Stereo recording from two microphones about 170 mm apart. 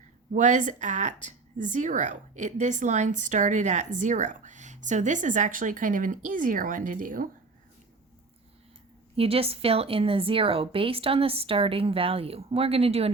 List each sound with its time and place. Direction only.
0.3 s a woman's voice: 45° right (ahead or behind)
9.1 s a woman's voice: 35° right (ahead or behind)